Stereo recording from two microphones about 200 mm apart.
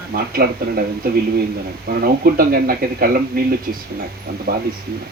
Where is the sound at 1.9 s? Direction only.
45° right (ahead or behind).